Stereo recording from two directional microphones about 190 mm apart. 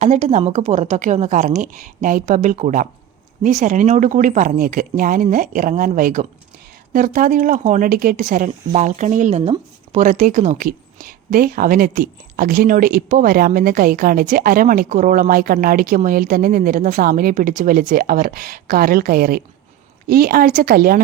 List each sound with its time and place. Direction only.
0.0 s a woman's voice: 35° right (ahead or behind)